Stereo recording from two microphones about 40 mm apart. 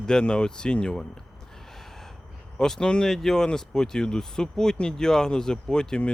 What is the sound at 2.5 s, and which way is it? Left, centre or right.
Speech, centre.